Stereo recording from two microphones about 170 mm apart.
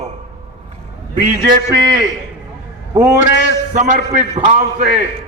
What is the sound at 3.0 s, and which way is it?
Speech, 20° right (ahead or behind).